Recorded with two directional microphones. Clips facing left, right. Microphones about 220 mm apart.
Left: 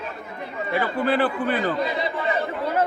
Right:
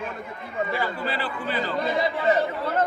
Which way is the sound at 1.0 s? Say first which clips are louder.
Left 8 dB; 55° left (ahead or behind).